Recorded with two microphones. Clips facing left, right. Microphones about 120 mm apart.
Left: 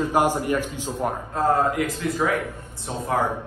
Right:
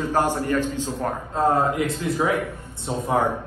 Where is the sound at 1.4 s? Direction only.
25° right (ahead or behind).